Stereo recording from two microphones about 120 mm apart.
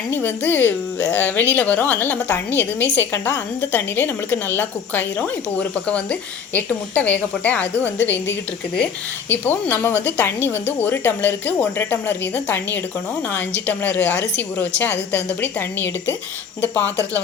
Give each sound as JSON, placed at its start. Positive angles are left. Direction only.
{"t": 0.1, "sound": "a woman's voice", "side_deg": 15}